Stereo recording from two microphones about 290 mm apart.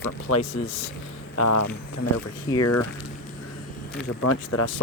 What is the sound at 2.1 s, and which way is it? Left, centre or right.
Speech, left.